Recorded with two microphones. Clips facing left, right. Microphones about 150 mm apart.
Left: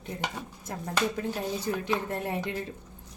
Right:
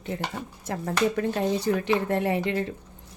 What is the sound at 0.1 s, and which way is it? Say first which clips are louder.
Speech: right 2 dB; 90° right.